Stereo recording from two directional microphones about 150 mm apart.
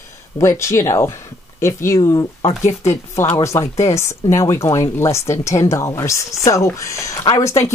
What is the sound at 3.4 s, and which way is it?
Speech, 20° left (ahead or behind).